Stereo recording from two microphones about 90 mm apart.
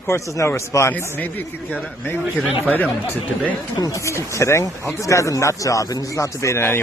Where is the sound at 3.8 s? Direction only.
35° left (ahead or behind).